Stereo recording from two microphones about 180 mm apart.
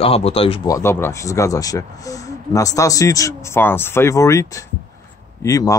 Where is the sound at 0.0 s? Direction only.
35° left (ahead or behind).